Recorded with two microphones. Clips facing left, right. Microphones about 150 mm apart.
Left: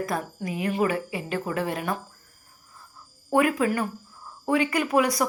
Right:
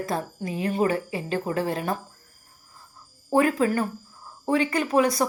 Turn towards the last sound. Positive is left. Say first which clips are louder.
# right 1 dB
turn(degrees=-25)  # may be behind; listen again after turning